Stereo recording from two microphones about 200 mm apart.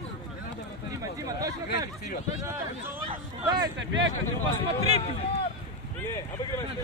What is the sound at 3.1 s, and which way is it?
Speech, 20° right (ahead or behind).